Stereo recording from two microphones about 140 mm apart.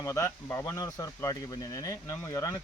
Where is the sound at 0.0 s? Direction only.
20° left (ahead or behind).